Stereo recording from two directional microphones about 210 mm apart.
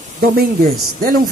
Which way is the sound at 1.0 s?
45° right (ahead or behind).